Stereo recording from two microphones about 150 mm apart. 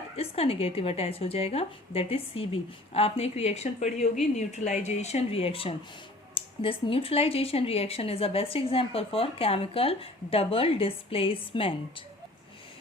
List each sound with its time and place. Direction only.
0.2 s speech: 40° left (ahead or behind)